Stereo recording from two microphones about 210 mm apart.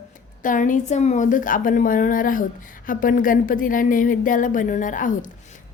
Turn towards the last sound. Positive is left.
turn(degrees=40)  # may be behind; listen again after turning